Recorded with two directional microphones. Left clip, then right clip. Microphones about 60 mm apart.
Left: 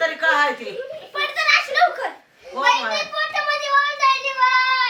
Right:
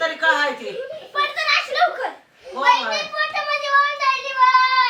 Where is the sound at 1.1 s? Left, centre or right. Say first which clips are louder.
Left 1 dB; centre.